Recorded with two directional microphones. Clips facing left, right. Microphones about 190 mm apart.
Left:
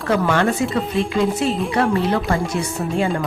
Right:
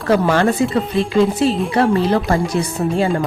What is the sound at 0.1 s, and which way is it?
Speech, 35° right (ahead or behind).